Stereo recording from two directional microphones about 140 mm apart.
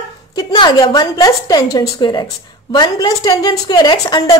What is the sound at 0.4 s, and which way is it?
A woman's voice, 30° left (ahead or behind).